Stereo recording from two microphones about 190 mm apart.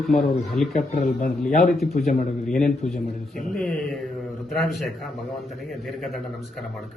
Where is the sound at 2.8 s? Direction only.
35° left (ahead or behind).